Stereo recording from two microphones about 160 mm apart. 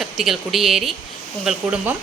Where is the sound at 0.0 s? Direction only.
Centre (ahead or behind).